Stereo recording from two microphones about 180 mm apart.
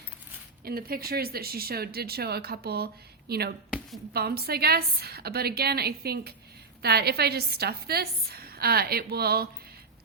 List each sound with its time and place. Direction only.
0.6 s speech: 55° right (ahead or behind)